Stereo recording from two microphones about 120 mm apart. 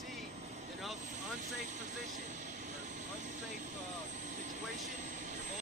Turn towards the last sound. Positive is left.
turn(degrees=-90)